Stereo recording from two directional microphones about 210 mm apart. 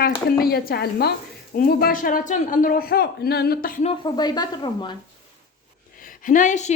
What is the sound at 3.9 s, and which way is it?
Speech, 20° left (ahead or behind).